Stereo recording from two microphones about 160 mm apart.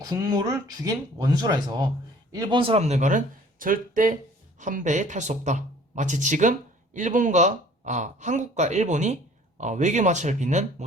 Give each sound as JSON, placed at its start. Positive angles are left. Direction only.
{"t": 0.0, "sound": "speech", "side_deg": -25}